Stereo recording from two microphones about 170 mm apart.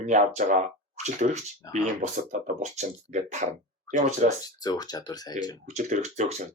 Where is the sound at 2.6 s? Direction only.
40° right (ahead or behind).